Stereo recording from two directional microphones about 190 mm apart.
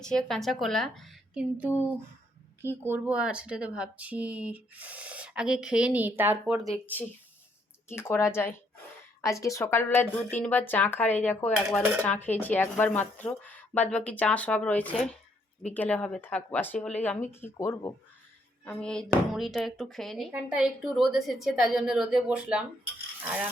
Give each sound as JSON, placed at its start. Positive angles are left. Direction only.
{"t": 0.0, "sound": "a woman's voice", "side_deg": 5}
{"t": 6.4, "sound": "a woman's voice", "side_deg": 0}
{"t": 7.9, "sound": "a woman's voice", "side_deg": 10}